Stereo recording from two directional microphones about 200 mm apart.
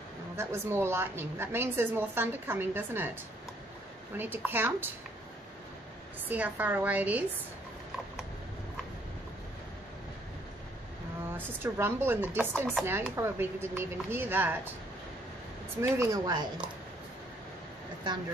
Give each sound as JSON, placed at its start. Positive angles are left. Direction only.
{"t": 0.4, "sound": "a woman's voice", "side_deg": -10}
{"t": 4.2, "sound": "a woman's voice", "side_deg": -10}
{"t": 6.2, "sound": "a woman's voice", "side_deg": -10}
{"t": 11.3, "sound": "a woman's voice", "side_deg": -10}
{"t": 15.9, "sound": "a woman's voice", "side_deg": -15}